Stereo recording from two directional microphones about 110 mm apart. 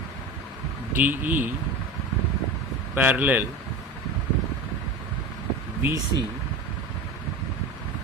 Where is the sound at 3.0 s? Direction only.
15° right (ahead or behind).